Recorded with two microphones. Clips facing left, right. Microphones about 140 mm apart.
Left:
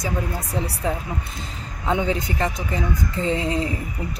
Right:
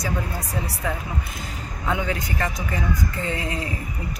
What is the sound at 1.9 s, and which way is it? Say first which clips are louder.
A woman's voice: left 3 dB; 25° left (ahead or behind).